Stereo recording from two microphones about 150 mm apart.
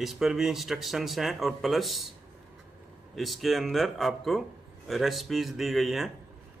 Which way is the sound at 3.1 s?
Centre (ahead or behind).